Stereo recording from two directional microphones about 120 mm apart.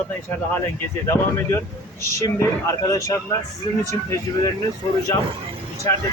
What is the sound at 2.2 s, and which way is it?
Speech, 25° left (ahead or behind).